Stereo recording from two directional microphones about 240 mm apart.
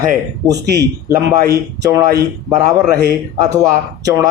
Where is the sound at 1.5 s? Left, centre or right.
Centre.